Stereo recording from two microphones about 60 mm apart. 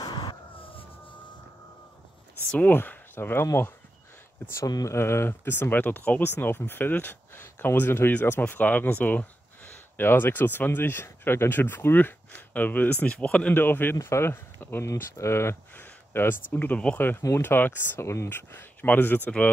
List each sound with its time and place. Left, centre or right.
2.7 s speech: left
4.6 s speech: left
4.9 s speech: left; by 13.5 s centre
13.5 s speech: left
14.0 s speech: left
15.1 s speech: left
15.7 s speech: left
18.3 s speech: left